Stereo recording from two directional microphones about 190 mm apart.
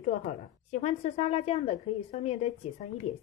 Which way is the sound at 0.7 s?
35° left (ahead or behind).